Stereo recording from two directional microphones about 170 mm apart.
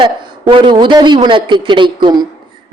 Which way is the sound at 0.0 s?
30° right (ahead or behind).